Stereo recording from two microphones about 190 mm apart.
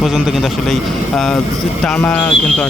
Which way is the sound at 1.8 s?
5° left (ahead or behind).